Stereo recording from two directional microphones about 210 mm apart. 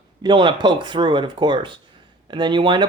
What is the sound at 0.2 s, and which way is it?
Speech, 20° right (ahead or behind).